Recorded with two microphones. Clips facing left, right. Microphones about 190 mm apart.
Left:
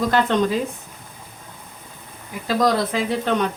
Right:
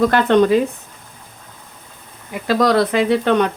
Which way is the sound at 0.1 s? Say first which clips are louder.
Right 6 dB; 65° right (ahead or behind).